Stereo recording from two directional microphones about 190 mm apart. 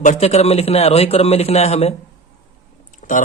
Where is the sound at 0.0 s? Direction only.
40° left (ahead or behind).